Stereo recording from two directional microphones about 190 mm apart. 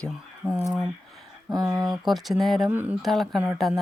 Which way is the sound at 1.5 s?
20° right (ahead or behind).